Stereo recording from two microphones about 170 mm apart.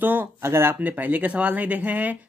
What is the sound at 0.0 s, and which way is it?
Speech, 10° right (ahead or behind).